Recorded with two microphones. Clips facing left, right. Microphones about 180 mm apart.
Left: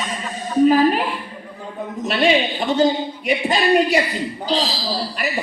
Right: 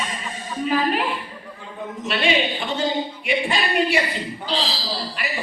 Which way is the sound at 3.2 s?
40° left (ahead or behind).